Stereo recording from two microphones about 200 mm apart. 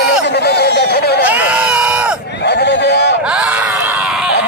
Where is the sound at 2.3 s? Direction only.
55° left (ahead or behind).